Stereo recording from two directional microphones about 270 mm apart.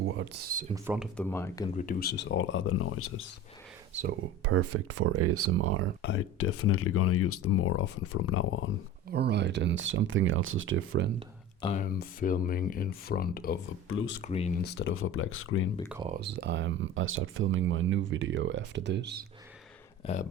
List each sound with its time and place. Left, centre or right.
0.0 s speech: right
0.7 s speech: centre
1.1 s speech: centre
1.7 s speech: left
3.9 s speech: right
4.4 s speech: right
6.0 s speech: left
9.1 s speech: right
11.6 s speech: left
14.6 s speech: left
16.0 s speech: right
20.0 s speech: left